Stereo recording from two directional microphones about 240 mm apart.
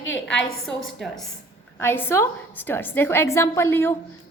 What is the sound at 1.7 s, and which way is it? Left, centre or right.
A woman's voice, centre.